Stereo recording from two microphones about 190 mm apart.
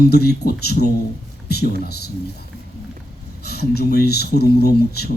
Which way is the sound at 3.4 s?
55° left (ahead or behind).